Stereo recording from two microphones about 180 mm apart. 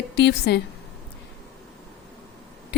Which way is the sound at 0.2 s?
70° left (ahead or behind).